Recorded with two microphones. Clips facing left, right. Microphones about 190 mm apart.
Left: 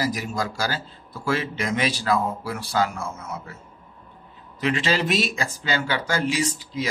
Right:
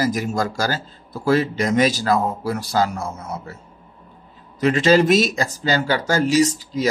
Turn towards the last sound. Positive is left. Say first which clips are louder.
# right 9 dB
turn(degrees=-40)  # may be behind; listen again after turning